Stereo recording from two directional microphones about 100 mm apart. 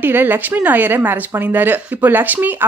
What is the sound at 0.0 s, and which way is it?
Speech, 20° right (ahead or behind).